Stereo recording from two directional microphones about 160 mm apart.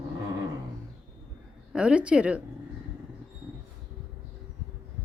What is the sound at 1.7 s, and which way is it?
Speech, 5° right (ahead or behind).